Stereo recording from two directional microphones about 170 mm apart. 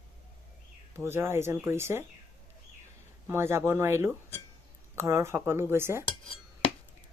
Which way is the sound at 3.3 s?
15° right (ahead or behind).